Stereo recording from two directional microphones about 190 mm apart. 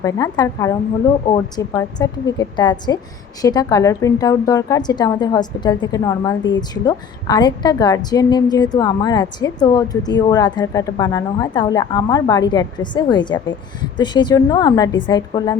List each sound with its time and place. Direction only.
0.0 s a woman's voice: 20° left (ahead or behind)